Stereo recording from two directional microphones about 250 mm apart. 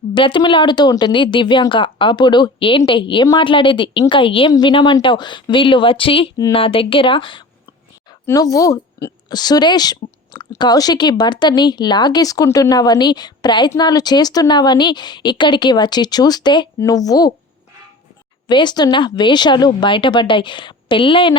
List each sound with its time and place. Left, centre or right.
0.1 s a woman's voice: centre
18.4 s speech: centre